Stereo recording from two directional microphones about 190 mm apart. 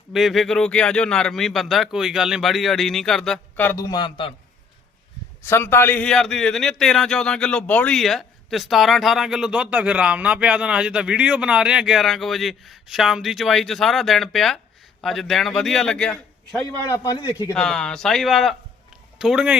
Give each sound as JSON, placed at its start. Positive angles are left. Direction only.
{"t": 0.1, "sound": "a man's voice", "side_deg": 0}
{"t": 5.4, "sound": "a man's voice", "side_deg": 15}
{"t": 16.9, "sound": "a man's voice", "side_deg": 20}
{"t": 17.5, "sound": "a man's voice", "side_deg": 5}